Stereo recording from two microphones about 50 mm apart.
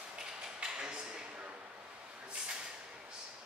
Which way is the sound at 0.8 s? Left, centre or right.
Centre.